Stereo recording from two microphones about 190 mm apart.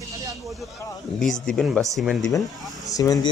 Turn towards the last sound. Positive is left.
turn(degrees=20)  # may be behind; listen again after turning